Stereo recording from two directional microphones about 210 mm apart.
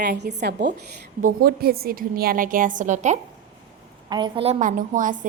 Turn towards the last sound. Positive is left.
turn(degrees=-40)  # may be behind; listen again after turning